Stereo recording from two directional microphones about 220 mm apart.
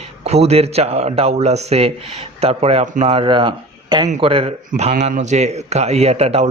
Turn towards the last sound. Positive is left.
turn(degrees=-30)  # may be behind; listen again after turning